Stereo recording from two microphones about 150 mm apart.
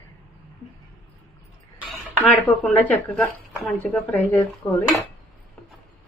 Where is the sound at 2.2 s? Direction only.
10° left (ahead or behind).